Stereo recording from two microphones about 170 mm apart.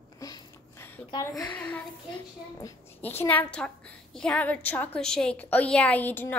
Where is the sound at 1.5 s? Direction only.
10° left (ahead or behind).